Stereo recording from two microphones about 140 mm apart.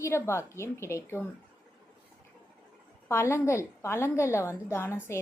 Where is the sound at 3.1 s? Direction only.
20° left (ahead or behind).